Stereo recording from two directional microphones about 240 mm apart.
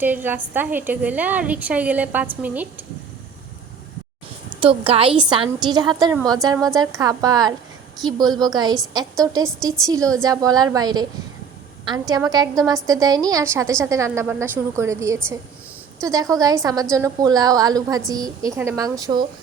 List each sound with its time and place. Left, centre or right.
0.0 s a woman's voice: centre
4.6 s a woman's voice: right